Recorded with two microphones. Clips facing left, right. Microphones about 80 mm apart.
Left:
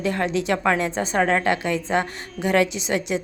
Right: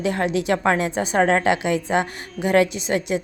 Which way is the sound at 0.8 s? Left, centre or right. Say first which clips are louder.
Right 2 dB; centre.